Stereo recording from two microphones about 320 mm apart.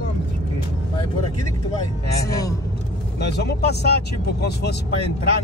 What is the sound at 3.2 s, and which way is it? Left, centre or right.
Speech, left.